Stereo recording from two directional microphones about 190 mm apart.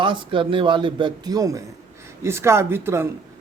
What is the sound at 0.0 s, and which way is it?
A man's voice, 25° right (ahead or behind).